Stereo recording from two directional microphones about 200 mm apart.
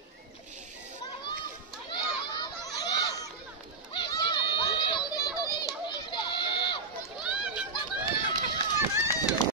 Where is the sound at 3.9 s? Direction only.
25° left (ahead or behind).